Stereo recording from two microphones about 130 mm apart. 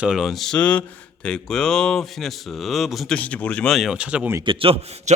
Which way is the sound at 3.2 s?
10° left (ahead or behind).